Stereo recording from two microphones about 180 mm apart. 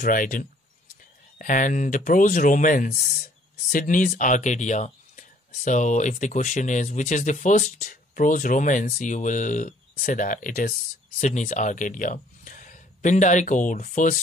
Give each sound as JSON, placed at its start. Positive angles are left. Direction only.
{"t": 0.0, "sound": "speech", "side_deg": 50}